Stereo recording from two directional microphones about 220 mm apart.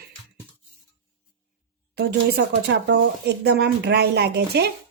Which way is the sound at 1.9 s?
50° right (ahead or behind).